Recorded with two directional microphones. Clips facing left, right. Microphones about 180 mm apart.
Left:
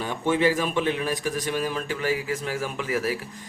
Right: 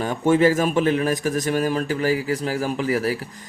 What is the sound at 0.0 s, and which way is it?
Speech, 45° right (ahead or behind).